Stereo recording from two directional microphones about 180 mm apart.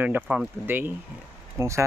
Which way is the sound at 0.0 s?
10° right (ahead or behind).